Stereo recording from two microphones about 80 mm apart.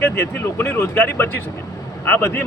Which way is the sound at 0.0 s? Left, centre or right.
Left.